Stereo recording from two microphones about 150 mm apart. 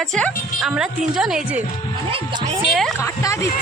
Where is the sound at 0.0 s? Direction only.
5° left (ahead or behind).